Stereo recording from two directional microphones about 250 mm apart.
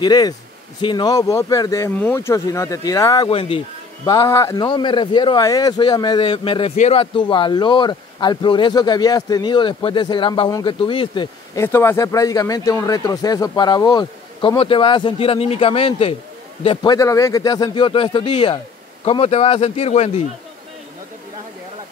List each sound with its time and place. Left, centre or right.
0.0 s speech: centre